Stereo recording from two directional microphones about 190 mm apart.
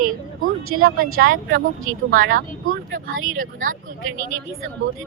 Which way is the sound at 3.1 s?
90° right.